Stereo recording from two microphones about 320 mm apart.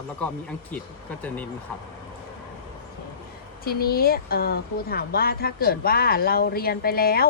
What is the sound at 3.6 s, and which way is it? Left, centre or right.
Speech, left.